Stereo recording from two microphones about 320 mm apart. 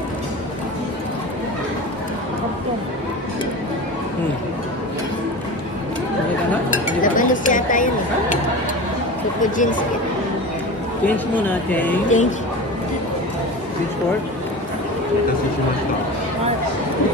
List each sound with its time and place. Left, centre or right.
7.0 s a sound: left
9.4 s speech: left
11.1 s speech: centre
12.1 s speech: left